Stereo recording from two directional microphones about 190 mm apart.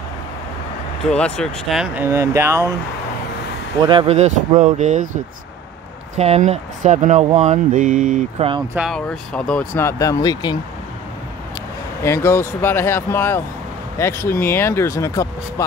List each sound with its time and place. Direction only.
1.1 s speech: 5° left (ahead or behind)
2.0 s speech: 15° right (ahead or behind)
3.8 s speech: 25° right (ahead or behind)
6.1 s speech: 35° right (ahead or behind)
8.7 s speech: centre (ahead or behind); by 10.6 s 20° left (ahead or behind)
12.0 s speech: 15° left (ahead or behind)